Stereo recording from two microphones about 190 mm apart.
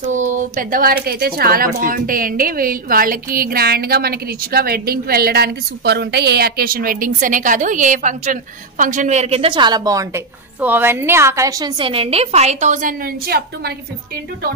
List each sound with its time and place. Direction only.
0.1 s speech: 40° right (ahead or behind)